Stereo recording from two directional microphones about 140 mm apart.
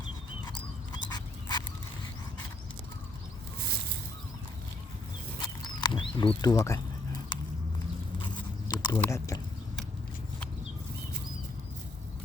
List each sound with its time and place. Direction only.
0.9 s dog: 30° left (ahead or behind)
5.4 s wild animals: 35° left (ahead or behind)
8.2 s biting: 30° left (ahead or behind)